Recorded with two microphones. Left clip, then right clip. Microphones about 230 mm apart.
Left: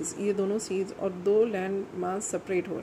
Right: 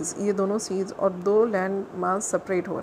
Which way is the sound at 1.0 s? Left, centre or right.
Centre.